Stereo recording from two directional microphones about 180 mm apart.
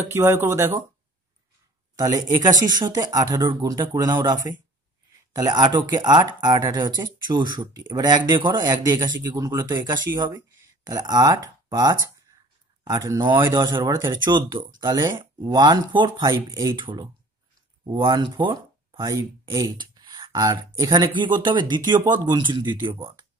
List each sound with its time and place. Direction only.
0.1 s speech: 15° right (ahead or behind)
2.0 s speech: 20° right (ahead or behind)